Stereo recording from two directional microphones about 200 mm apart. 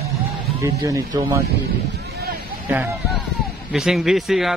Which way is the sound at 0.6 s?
15° right (ahead or behind).